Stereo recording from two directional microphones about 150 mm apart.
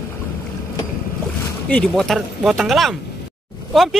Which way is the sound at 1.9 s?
Centre (ahead or behind).